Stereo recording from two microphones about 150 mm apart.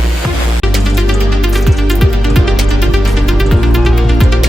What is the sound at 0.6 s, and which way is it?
Music, centre (ahead or behind).